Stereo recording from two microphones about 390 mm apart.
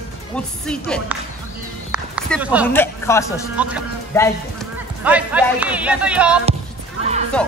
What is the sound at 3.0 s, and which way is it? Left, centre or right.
A man's voice, centre.